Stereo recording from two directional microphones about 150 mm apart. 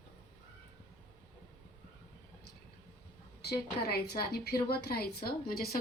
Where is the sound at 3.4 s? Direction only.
90° left.